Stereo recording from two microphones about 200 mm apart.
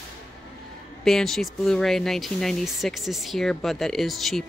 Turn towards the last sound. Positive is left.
turn(degrees=0)  # may be behind; listen again after turning